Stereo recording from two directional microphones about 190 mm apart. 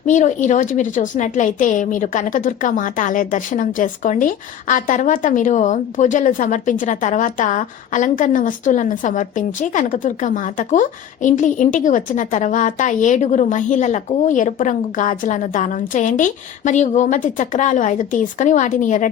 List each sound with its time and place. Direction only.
0.0 s a woman's voice: 40° left (ahead or behind)